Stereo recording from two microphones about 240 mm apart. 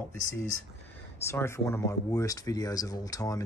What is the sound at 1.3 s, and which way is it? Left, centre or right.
Speech, centre.